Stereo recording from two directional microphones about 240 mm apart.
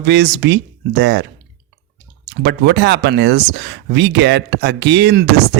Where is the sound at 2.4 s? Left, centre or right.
Right.